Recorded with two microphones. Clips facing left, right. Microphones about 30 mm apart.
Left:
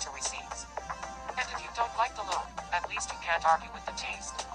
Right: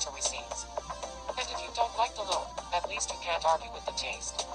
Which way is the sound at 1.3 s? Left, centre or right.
Right.